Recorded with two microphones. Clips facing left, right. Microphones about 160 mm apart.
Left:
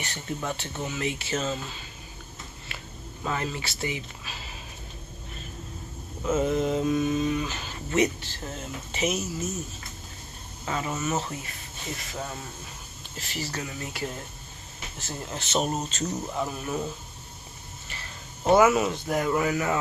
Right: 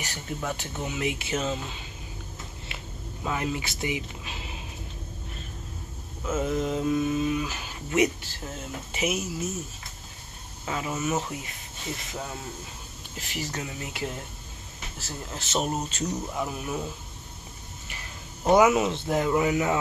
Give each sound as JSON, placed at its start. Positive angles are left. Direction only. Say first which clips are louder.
{"t": 0.0, "sound": "speech", "louder": "left 1 dB", "side_deg": -10}
{"t": 3.3, "sound": "speech", "louder": "right 1 dB", "side_deg": -10}
{"t": 6.2, "sound": "speech", "louder": "left 3 dB", "side_deg": 0}
{"t": 10.6, "sound": "speech", "louder": "even", "side_deg": -5}
{"t": 13.2, "sound": "speech", "louder": "even", "side_deg": -15}
{"t": 15.0, "sound": "speech", "louder": "left 2 dB", "side_deg": 0}